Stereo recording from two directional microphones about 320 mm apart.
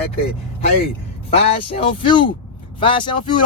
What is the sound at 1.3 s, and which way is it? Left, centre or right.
Speech, centre.